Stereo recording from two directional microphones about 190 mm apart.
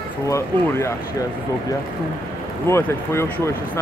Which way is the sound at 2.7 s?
15° left (ahead or behind).